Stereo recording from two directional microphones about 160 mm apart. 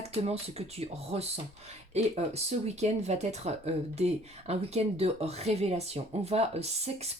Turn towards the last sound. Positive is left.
turn(degrees=-40)  # may be behind; listen again after turning